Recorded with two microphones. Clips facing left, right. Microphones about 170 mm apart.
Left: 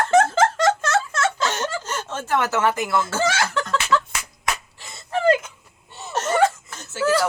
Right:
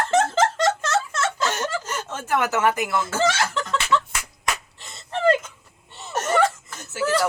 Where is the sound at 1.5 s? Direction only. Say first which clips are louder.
Left 1 dB; 15° right (ahead or behind).